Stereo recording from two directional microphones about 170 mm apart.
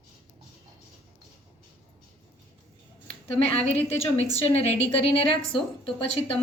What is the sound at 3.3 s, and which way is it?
A woman's voice, 35° left (ahead or behind).